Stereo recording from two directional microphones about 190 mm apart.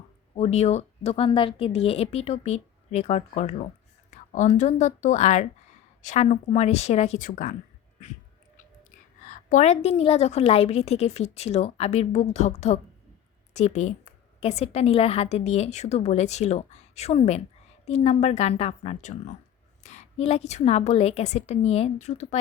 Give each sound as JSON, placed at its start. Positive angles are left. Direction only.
{"t": 0.3, "sound": "a woman's voice", "side_deg": 35}
{"t": 8.5, "sound": "a woman's voice", "side_deg": 40}